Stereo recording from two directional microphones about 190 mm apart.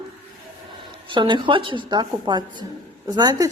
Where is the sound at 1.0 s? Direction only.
25° right (ahead or behind).